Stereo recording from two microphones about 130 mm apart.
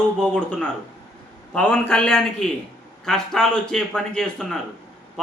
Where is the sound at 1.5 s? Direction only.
5° left (ahead or behind).